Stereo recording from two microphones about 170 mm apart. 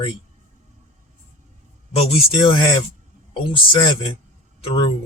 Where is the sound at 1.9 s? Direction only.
35° left (ahead or behind).